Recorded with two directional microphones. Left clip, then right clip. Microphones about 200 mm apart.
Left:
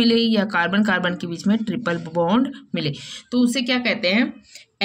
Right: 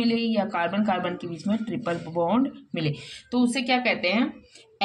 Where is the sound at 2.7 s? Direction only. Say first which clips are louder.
Left 4 dB; 15° left (ahead or behind).